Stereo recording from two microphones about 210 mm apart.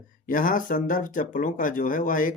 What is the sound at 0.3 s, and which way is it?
Speech, 40° left (ahead or behind).